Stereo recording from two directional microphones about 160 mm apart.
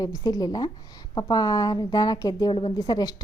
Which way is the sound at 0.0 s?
20° left (ahead or behind).